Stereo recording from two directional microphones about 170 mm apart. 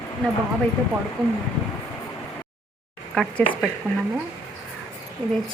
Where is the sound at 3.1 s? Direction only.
5° left (ahead or behind).